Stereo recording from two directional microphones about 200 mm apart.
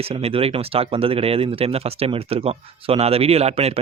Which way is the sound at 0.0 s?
30° right (ahead or behind).